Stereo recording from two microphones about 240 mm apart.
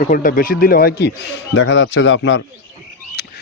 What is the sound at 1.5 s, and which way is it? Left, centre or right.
Speech, left.